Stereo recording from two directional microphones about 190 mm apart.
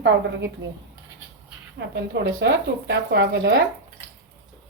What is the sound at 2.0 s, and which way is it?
Speech, 60° right (ahead or behind).